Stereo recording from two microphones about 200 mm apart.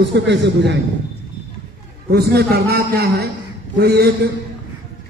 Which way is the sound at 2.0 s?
55° right (ahead or behind).